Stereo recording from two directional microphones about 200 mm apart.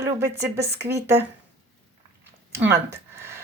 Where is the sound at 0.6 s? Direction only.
55° right (ahead or behind).